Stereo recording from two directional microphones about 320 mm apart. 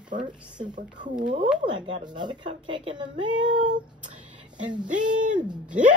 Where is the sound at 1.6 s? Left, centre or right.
Centre.